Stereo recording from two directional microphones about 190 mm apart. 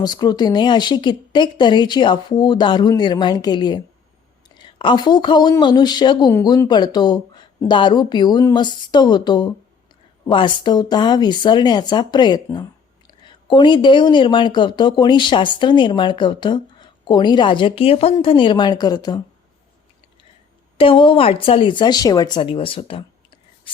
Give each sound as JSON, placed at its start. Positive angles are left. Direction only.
{"t": 0.0, "sound": "speech", "side_deg": 20}
{"t": 20.7, "sound": "speech", "side_deg": 25}